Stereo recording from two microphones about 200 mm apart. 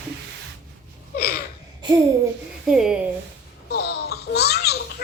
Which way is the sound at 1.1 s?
50° left (ahead or behind).